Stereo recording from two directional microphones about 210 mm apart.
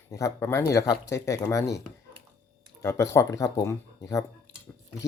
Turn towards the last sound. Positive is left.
turn(degrees=15)  # may be behind; listen again after turning